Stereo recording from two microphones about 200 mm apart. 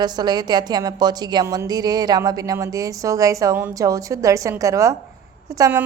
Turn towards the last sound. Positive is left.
turn(degrees=-15)  # may be behind; listen again after turning